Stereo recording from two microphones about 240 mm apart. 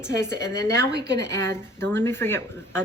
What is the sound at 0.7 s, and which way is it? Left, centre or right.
Speech, right.